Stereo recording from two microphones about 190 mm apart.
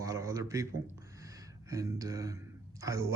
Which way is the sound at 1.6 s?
15° right (ahead or behind).